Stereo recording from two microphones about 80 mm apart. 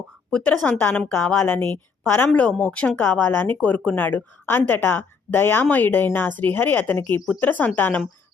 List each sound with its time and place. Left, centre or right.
0.3 s a woman's voice: centre
2.3 s a woman's voice: centre